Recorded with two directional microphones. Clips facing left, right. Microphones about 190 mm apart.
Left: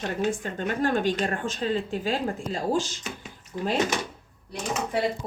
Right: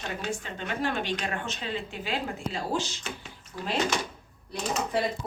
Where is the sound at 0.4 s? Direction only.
45° left (ahead or behind).